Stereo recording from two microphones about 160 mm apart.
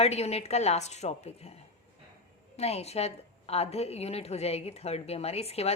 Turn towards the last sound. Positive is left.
turn(degrees=40)  # may be behind; listen again after turning